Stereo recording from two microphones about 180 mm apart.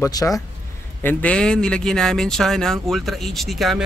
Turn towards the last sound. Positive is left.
turn(degrees=0)  # may be behind; listen again after turning